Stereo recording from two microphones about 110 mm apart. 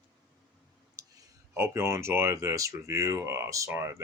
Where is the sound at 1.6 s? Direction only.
25° right (ahead or behind).